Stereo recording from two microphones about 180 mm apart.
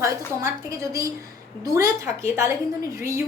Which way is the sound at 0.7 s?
15° right (ahead or behind).